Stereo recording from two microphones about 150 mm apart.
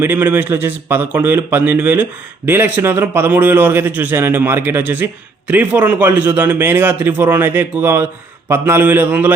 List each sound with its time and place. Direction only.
0.0 s a man's voice: 10° right (ahead or behind)